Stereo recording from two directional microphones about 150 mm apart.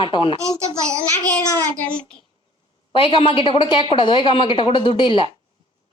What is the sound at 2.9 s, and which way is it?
Speech, 35° left (ahead or behind).